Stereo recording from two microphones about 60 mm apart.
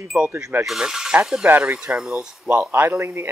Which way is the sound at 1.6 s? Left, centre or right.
Right.